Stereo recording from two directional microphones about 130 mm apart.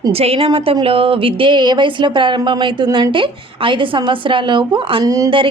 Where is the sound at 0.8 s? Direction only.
45° right (ahead or behind).